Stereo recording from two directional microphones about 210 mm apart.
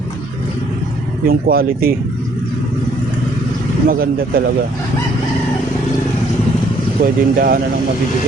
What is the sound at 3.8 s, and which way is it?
Speech, 45° right (ahead or behind).